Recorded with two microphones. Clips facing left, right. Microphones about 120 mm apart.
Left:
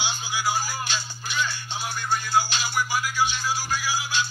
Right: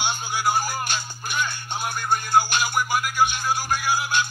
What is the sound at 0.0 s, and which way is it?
Music, 55° right (ahead or behind).